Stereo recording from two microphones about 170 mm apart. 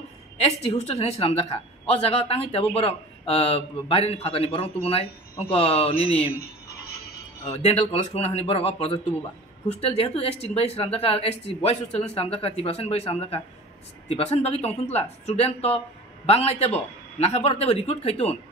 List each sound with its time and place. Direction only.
0.4 s speech: 40° left (ahead or behind)
7.4 s speech: 35° left (ahead or behind)